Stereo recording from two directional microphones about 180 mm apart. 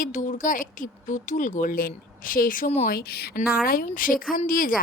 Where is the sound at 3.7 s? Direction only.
50° left (ahead or behind).